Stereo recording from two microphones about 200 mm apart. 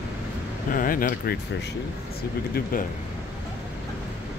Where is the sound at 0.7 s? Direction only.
45° left (ahead or behind).